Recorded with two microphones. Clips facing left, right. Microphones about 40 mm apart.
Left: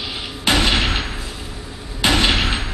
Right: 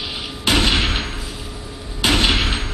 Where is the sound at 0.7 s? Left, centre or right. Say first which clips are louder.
Even; left.